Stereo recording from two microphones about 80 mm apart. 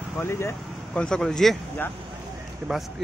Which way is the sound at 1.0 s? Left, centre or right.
Centre.